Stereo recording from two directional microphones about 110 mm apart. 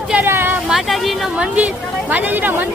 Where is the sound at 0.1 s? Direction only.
20° right (ahead or behind).